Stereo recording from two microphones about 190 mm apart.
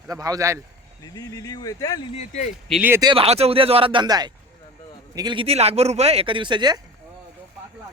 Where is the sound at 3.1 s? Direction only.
30° right (ahead or behind).